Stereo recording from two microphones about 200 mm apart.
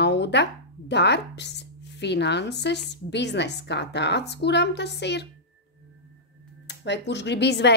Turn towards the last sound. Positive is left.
turn(degrees=60)  # may be behind; listen again after turning